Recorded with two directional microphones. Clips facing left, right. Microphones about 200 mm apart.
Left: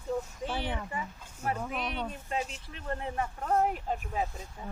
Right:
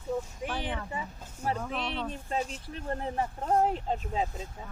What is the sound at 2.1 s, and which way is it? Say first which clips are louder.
Speech: right 2 dB; 35° right (ahead or behind).